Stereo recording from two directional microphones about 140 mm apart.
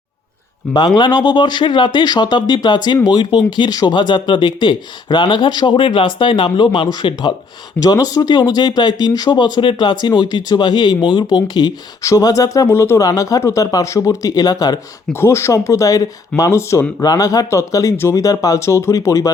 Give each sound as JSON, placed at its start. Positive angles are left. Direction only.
{"t": 0.7, "sound": "speech", "side_deg": 30}